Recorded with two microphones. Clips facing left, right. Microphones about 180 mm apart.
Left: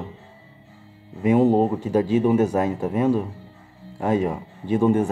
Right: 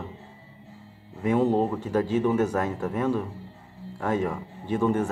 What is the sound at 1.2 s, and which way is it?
Speech, 15° left (ahead or behind).